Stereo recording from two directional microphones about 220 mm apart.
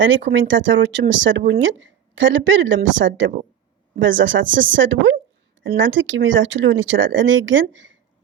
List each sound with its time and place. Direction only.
0.0 s speech: 55° right (ahead or behind)